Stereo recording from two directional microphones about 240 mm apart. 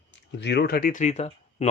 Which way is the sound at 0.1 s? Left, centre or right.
Left.